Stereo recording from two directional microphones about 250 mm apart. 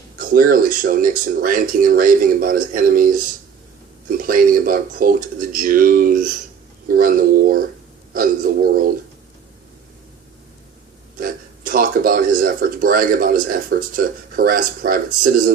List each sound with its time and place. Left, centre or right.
0.2 s speech: right
11.2 s speech: right